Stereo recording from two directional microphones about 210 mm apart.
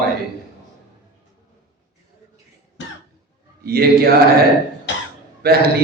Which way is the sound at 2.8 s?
65° left (ahead or behind).